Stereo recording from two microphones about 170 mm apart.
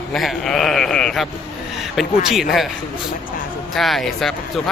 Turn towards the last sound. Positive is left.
turn(degrees=0)  # may be behind; listen again after turning